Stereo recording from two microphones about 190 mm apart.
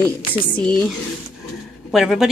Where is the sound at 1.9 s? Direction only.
Centre (ahead or behind).